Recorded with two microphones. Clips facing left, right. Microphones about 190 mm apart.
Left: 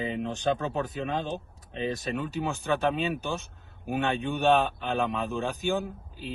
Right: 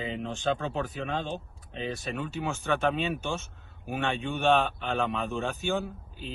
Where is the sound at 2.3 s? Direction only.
15° left (ahead or behind).